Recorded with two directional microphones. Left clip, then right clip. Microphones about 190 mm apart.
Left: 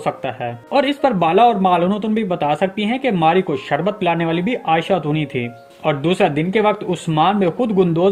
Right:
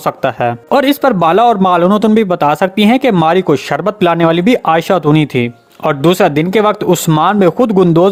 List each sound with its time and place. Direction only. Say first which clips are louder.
0.0 s speech: right 9 dB; 30° right (ahead or behind)